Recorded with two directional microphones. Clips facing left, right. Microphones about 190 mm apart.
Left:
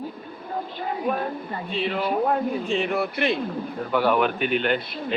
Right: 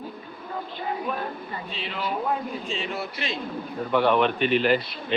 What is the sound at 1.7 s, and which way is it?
Speech, 55° left (ahead or behind).